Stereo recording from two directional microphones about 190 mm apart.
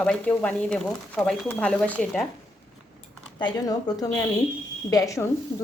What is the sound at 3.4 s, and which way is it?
Speech, 20° left (ahead or behind).